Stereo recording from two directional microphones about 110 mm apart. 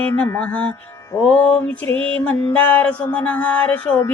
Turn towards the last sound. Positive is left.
turn(degrees=10)  # may be behind; listen again after turning